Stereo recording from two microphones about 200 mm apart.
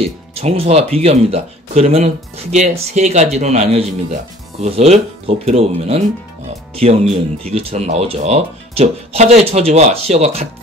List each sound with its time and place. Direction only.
0.0 s speech: 30° right (ahead or behind)